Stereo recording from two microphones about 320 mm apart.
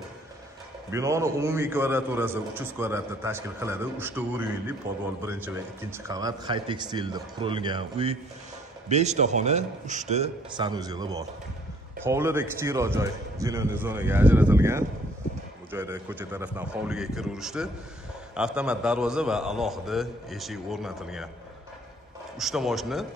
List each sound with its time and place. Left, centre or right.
0.9 s a man's voice: centre
22.4 s a man's voice: centre